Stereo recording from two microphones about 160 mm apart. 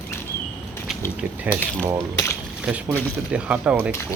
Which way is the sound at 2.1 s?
20° left (ahead or behind).